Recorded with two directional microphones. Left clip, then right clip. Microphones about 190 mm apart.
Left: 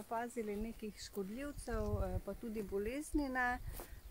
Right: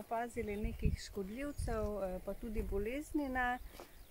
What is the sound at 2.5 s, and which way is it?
Speech, centre (ahead or behind).